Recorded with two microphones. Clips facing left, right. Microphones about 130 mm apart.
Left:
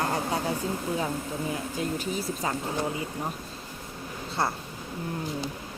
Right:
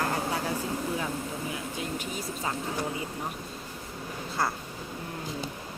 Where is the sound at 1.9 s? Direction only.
35° left (ahead or behind).